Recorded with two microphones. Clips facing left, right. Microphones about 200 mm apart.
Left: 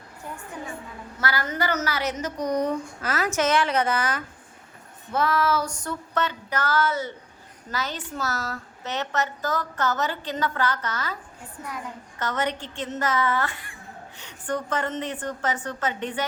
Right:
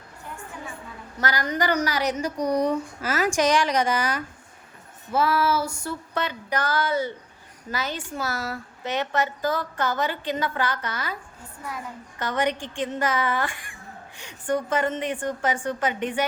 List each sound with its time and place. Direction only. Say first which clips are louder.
1.2 s a woman's voice: right 2 dB; 15° right (ahead or behind)
12.2 s a woman's voice: right 2 dB; 15° right (ahead or behind)